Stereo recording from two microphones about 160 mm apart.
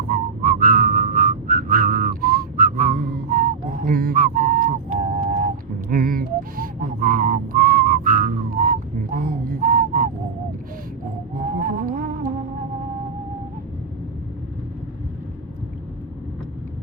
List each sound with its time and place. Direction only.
0.1 s whistling: 60° right (ahead or behind)
11.3 s music: 60° right (ahead or behind)